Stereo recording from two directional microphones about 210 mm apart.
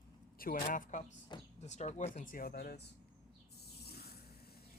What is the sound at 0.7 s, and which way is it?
Speech, 40° left (ahead or behind).